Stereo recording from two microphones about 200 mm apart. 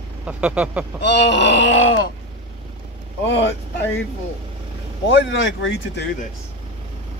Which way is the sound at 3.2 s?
60° left (ahead or behind).